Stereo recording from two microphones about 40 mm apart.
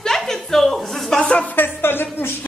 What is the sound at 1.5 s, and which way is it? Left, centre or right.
Music, left.